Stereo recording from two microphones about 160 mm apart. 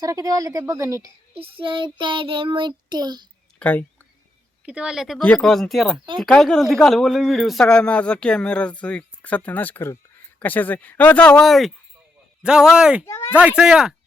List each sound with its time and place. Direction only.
0.0 s a woman's voice: 20° right (ahead or behind)
1.3 s child singing: 35° right (ahead or behind)
3.6 s speech: 10° left (ahead or behind)
4.6 s a man's voice: 5° right (ahead or behind)
13.1 s speech: 15° left (ahead or behind)
13.6 s a man's voice: 5° right (ahead or behind)